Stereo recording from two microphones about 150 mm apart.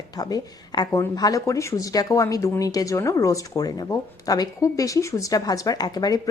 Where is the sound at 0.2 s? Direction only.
25° left (ahead or behind).